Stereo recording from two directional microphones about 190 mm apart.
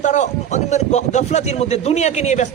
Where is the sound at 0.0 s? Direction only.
40° left (ahead or behind).